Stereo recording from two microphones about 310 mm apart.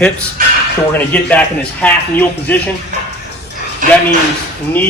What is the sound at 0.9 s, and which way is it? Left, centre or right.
Speech, centre.